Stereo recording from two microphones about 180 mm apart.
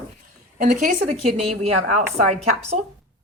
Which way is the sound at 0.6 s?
45° right (ahead or behind).